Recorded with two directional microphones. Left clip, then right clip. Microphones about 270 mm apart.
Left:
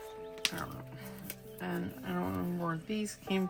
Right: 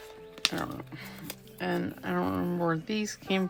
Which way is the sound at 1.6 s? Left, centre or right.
Right.